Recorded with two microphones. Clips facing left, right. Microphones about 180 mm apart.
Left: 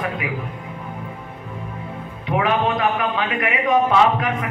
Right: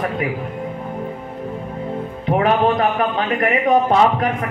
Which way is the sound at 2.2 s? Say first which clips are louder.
Right 4 dB; 40° right (ahead or behind).